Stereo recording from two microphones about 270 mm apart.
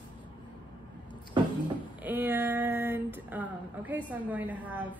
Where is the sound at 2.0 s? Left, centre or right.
Centre.